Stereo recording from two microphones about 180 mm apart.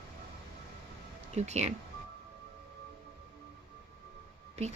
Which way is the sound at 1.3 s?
40° right (ahead or behind).